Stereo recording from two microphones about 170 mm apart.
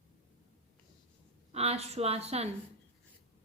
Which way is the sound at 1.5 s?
35° right (ahead or behind).